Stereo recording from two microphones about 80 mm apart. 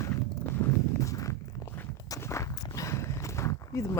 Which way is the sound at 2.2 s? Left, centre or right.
Left.